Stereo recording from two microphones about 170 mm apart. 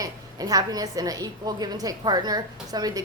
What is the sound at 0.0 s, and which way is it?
A woman's voice, 20° right (ahead or behind).